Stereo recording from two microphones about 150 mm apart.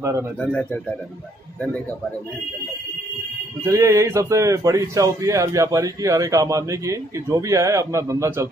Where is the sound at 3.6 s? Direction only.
20° right (ahead or behind).